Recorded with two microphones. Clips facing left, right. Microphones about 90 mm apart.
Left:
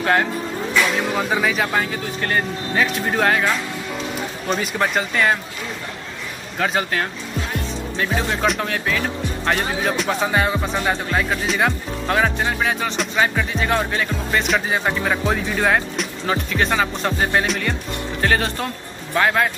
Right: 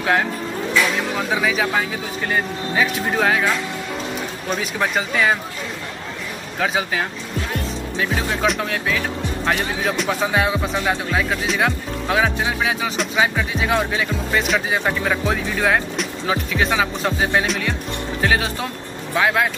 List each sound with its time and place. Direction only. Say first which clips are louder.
0.0 s speech: left 1 dB; centre (ahead or behind)
6.6 s speech: even; 5° right (ahead or behind)